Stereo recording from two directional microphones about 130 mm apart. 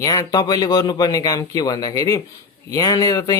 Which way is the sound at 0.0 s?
30° left (ahead or behind).